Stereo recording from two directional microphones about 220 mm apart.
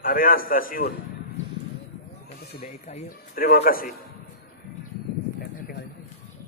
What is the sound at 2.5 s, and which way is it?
A man's voice, 30° left (ahead or behind).